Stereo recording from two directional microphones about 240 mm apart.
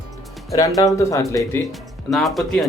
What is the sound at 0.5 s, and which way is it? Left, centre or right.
Speech, centre.